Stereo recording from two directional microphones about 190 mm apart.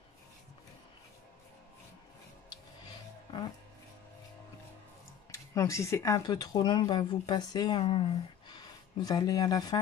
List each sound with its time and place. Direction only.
5.3 s speech: 15° left (ahead or behind)